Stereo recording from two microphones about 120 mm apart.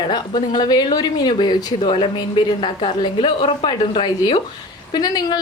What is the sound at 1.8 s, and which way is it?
A woman's voice, 50° left (ahead or behind).